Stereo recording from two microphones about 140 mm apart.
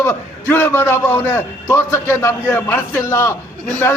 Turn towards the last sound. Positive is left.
turn(degrees=10)  # may be behind; listen again after turning